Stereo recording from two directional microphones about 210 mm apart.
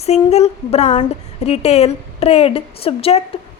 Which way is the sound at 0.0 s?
30° left (ahead or behind).